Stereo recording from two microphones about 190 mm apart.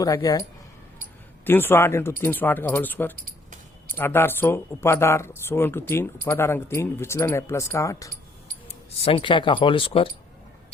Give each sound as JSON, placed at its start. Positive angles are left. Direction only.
{"t": 0.0, "sound": "speech", "side_deg": 20}
{"t": 1.5, "sound": "speech", "side_deg": 10}
{"t": 8.6, "sound": "speech", "side_deg": 30}